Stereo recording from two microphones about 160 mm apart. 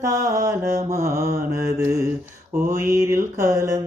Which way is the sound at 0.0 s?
20° right (ahead or behind).